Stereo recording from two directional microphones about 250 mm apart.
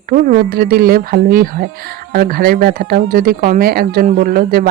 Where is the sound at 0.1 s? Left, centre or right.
Right.